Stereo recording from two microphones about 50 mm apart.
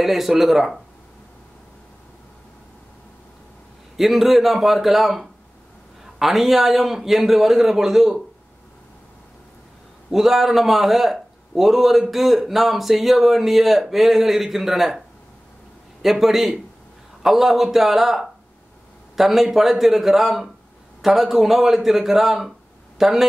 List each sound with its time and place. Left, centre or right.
0.0 s a man's voice: centre
3.9 s a man's voice: centre
10.1 s a man's voice: centre
16.0 s a man's voice: centre